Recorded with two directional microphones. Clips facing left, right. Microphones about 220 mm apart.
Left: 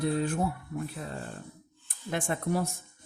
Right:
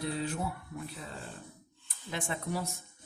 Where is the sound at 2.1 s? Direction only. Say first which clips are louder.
Left 6 dB; 50° left (ahead or behind).